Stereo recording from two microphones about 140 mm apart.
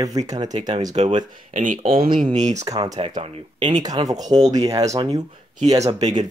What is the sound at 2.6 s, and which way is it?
Speech, 25° right (ahead or behind).